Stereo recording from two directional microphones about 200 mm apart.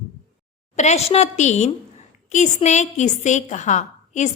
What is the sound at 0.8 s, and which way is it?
A woman's voice, 35° left (ahead or behind).